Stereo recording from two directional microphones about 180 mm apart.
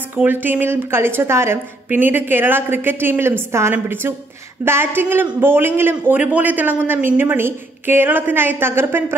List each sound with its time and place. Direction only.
0.1 s a man's voice: 10° right (ahead or behind)